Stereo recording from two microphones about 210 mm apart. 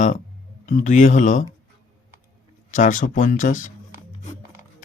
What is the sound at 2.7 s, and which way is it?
Speech, 40° left (ahead or behind).